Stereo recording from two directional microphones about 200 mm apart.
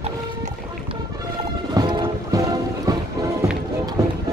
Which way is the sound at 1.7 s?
20° right (ahead or behind).